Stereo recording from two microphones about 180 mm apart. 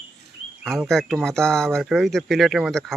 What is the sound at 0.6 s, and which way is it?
Speech, centre (ahead or behind).